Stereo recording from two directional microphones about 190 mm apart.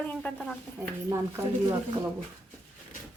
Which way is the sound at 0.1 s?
5° left (ahead or behind).